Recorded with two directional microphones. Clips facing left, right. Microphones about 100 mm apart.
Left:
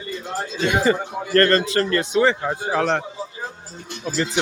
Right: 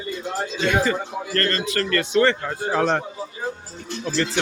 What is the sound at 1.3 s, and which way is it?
Speech, 40° left (ahead or behind).